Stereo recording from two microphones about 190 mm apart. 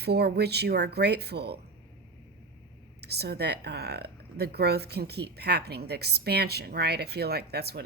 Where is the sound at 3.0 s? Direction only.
60° right (ahead or behind).